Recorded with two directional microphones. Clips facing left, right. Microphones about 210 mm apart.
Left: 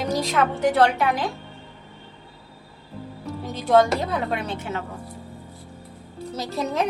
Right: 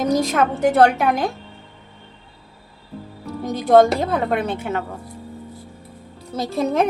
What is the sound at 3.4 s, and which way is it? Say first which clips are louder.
A woman's voice: right 5 dB; 50° right (ahead or behind).